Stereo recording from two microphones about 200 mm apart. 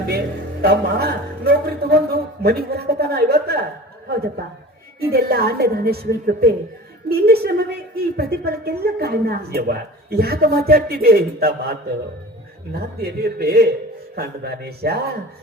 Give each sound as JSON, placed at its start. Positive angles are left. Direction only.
{"t": 0.6, "sound": "a man's voice", "side_deg": -50}